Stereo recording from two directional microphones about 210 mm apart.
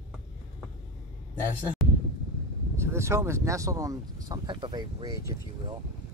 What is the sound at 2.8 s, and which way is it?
Speech, 10° right (ahead or behind).